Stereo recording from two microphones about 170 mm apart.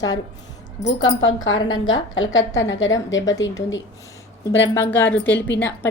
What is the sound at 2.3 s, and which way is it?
Speech, 90° left.